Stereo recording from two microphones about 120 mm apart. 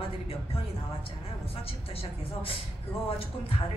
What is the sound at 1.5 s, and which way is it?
A man's voice, 55° left (ahead or behind).